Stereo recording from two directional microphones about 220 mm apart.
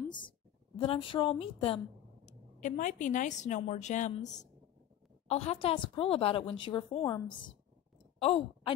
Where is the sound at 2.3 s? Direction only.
35° left (ahead or behind).